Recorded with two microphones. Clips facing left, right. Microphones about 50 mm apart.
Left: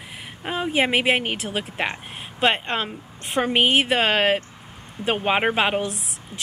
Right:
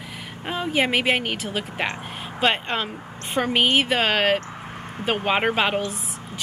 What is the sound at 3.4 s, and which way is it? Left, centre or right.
A woman's voice, centre.